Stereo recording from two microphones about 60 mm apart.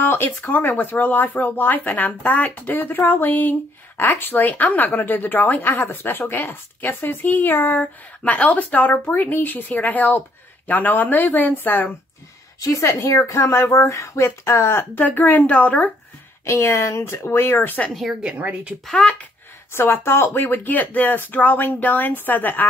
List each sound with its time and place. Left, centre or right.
0.0 s speech: left
7.8 s speech: centre
12.5 s a woman's voice: left
15.0 s speech: left
16.4 s a woman's voice: left
17.1 s speech: left
18.2 s speech: right
19.0 s speech: centre
19.7 s speech: left